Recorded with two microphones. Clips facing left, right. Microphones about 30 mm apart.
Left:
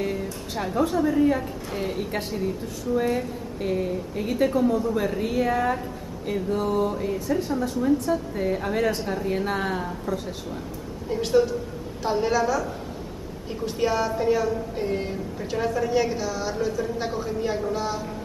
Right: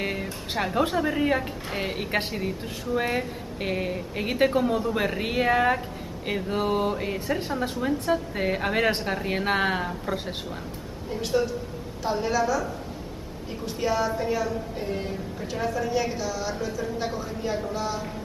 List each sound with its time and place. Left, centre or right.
0.0 s a sound: right
0.7 s a woman's voice: right
11.1 s a woman's voice: centre
13.7 s a woman's voice: centre